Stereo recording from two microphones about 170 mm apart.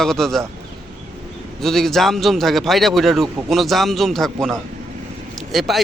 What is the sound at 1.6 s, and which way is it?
Speech, centre (ahead or behind).